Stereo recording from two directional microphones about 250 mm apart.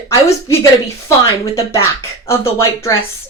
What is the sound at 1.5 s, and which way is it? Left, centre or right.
Speech, centre.